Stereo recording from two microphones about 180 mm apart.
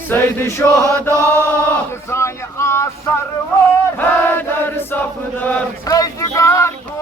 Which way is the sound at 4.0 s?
10° left (ahead or behind).